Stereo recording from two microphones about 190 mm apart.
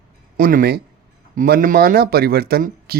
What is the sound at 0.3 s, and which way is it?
Speech, 50° right (ahead or behind).